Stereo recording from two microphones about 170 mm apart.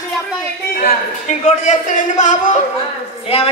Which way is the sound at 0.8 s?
45° left (ahead or behind).